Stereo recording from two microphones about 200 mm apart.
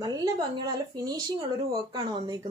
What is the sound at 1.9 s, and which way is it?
Speech, 20° right (ahead or behind).